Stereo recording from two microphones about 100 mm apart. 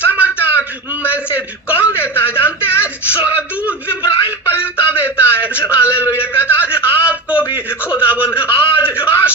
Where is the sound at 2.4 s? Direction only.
25° left (ahead or behind).